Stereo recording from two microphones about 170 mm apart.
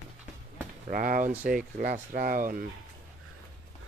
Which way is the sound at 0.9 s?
55° right (ahead or behind).